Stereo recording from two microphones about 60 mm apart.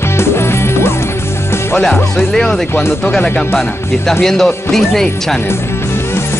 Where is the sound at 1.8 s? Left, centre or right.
Centre.